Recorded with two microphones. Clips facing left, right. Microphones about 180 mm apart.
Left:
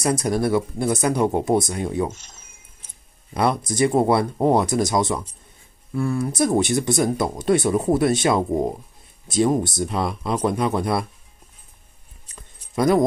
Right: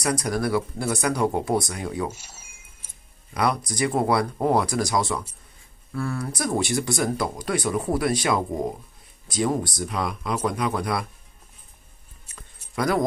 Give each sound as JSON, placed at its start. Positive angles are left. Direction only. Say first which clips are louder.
{"t": 0.0, "sound": "speech", "louder": "left 4 dB", "side_deg": 25}
{"t": 2.0, "sound": "music", "louder": "left 2 dB", "side_deg": -10}
{"t": 3.3, "sound": "speech", "louder": "left 4 dB", "side_deg": 25}
{"t": 12.7, "sound": "speech", "louder": "left 6 dB", "side_deg": 25}